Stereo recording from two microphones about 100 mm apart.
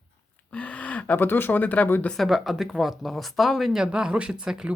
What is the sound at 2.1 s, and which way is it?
Speech, centre (ahead or behind).